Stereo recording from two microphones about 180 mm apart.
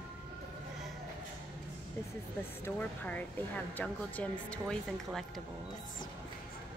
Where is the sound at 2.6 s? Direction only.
10° left (ahead or behind).